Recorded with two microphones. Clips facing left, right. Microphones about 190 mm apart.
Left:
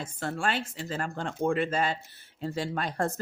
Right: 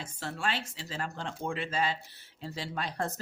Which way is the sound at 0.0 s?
50° left (ahead or behind).